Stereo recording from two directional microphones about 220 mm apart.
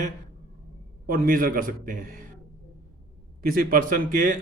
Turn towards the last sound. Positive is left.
turn(degrees=-40)  # may be behind; listen again after turning